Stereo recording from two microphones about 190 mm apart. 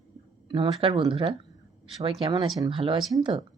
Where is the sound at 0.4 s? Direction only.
25° right (ahead or behind).